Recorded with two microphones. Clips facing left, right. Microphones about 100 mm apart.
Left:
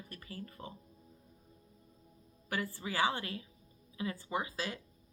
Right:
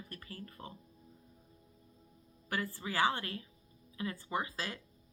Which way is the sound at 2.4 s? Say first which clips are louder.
Even; 20° left (ahead or behind).